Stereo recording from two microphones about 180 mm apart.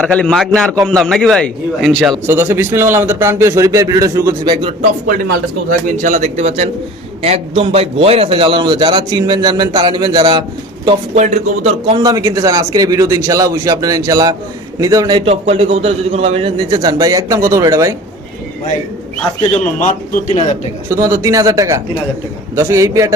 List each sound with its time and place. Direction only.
0.0 s a man's voice: 5° left (ahead or behind)
2.2 s a man's voice: 10° right (ahead or behind)
6.0 s a man's voice: 45° right (ahead or behind); by 10.4 s 25° right (ahead or behind)
10.8 s speech: 35° right (ahead or behind)
11.9 s a man's voice: 20° right (ahead or behind)
15.2 s a man's voice: 35° right (ahead or behind); by 17.9 s 20° right (ahead or behind)
19.4 s speech: 40° left (ahead or behind)
20.9 s a man's voice: 15° right (ahead or behind)